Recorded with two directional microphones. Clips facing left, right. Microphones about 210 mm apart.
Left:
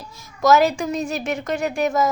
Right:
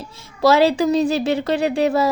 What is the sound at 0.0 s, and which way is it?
A woman's voice, 30° right (ahead or behind).